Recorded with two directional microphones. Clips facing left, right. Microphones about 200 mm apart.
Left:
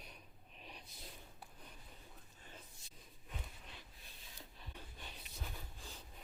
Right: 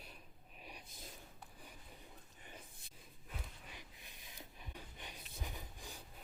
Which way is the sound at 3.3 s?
10° right (ahead or behind).